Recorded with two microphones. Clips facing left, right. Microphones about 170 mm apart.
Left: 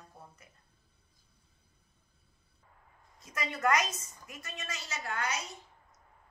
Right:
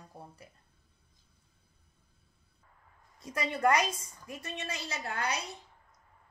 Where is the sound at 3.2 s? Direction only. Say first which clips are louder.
Right 3 dB; 30° right (ahead or behind).